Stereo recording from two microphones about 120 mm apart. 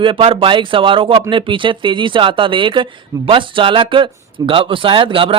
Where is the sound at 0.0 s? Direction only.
45° right (ahead or behind).